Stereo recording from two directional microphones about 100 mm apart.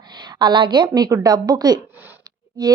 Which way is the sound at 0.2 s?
45° right (ahead or behind).